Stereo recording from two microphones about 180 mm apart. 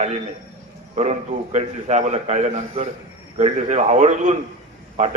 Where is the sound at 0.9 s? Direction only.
40° right (ahead or behind).